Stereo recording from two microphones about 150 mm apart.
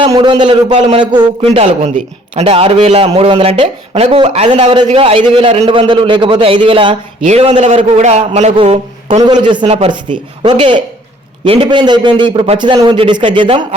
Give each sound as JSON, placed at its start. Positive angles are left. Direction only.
{"t": 0.2, "sound": "speech", "side_deg": -30}
{"t": 1.5, "sound": "a man's voice", "side_deg": -45}
{"t": 7.6, "sound": "a man's voice", "side_deg": -50}
{"t": 9.2, "sound": "speech", "side_deg": -30}